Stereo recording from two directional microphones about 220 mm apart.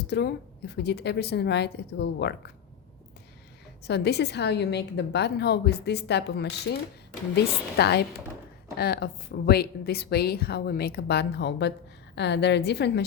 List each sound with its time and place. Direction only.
0.1 s a woman's voice: 50° left (ahead or behind)
3.8 s a woman's voice: 50° left (ahead or behind)